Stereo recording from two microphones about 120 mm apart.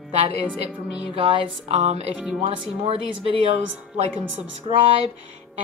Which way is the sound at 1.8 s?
65° right (ahead or behind).